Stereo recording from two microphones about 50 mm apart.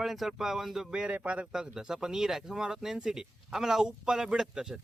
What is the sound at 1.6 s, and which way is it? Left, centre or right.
Speech, centre.